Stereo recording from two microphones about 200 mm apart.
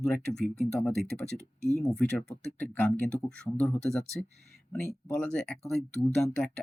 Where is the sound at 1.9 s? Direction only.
5° left (ahead or behind).